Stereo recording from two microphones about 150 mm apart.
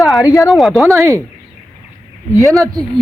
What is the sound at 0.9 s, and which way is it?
Speech, 20° right (ahead or behind).